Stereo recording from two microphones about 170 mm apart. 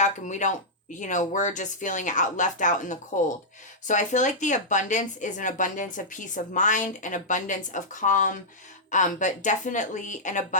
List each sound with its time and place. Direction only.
0.0 s speech: 45° left (ahead or behind)